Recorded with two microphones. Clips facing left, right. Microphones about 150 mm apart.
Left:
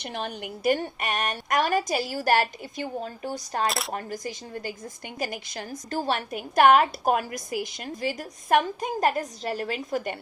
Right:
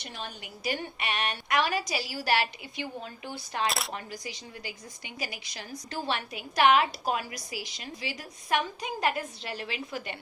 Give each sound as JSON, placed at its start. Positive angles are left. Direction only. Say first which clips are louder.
{"t": 0.0, "sound": "a woman's voice", "louder": "left 8 dB", "side_deg": 60}
{"t": 3.7, "sound": "speech", "louder": "left 3 dB", "side_deg": 0}
{"t": 3.9, "sound": "a woman's voice", "louder": "left 6 dB", "side_deg": 50}